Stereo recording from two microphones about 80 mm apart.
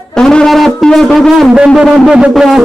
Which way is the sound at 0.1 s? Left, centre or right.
Centre.